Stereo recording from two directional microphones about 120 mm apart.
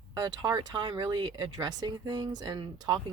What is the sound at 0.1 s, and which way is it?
Speech, 35° right (ahead or behind).